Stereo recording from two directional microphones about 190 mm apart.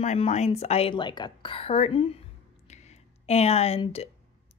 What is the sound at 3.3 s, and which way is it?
Speech, 35° left (ahead or behind).